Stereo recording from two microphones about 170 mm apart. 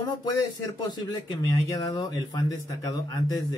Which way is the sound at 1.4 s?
20° left (ahead or behind).